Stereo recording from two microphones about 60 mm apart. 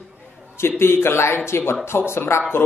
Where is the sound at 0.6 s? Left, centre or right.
Left.